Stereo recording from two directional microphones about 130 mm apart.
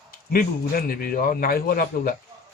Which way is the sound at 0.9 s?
90° left.